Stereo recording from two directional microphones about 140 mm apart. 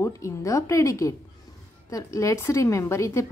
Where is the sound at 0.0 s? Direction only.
20° left (ahead or behind).